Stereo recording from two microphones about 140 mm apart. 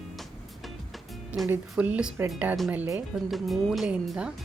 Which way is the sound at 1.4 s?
15° right (ahead or behind).